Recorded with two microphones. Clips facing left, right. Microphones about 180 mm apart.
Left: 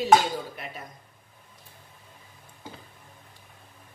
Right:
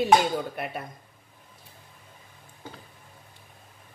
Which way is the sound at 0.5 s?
60° right (ahead or behind).